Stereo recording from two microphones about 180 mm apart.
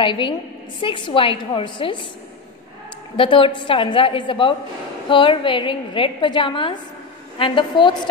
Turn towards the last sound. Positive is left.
turn(degrees=25)  # may be behind; listen again after turning